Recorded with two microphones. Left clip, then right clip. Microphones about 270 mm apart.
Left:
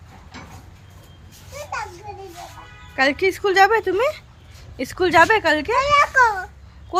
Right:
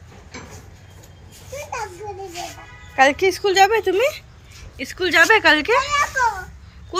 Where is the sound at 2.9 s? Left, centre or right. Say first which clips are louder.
Right 3 dB; centre.